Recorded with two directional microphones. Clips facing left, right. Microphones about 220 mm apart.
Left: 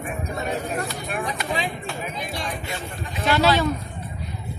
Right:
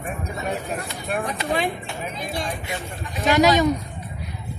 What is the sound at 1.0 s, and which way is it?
Speech, 50° right (ahead or behind).